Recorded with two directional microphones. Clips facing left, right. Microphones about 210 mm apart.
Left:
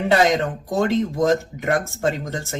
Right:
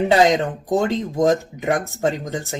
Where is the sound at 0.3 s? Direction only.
15° right (ahead or behind).